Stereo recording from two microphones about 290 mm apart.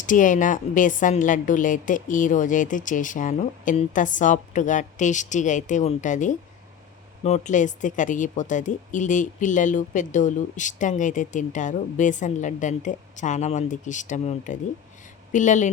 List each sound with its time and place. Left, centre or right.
0.0 s a woman's voice: left